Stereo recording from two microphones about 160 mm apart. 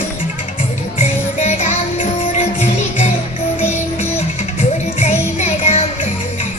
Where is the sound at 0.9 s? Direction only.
40° left (ahead or behind).